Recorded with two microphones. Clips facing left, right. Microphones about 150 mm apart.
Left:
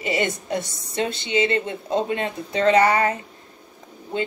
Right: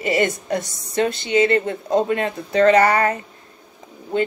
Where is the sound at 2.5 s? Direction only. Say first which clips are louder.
Right 3 dB; 45° right (ahead or behind).